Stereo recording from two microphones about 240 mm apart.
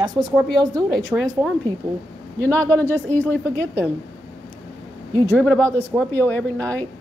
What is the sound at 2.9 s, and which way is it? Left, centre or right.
Speech, centre.